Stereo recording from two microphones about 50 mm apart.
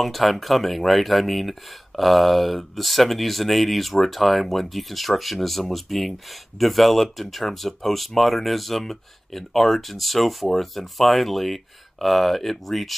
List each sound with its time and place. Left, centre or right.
0.0 s speech: centre